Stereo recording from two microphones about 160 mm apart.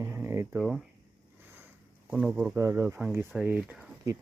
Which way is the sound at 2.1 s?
10° right (ahead or behind).